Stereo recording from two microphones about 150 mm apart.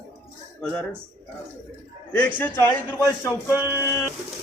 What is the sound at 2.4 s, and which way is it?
Speech, 15° left (ahead or behind).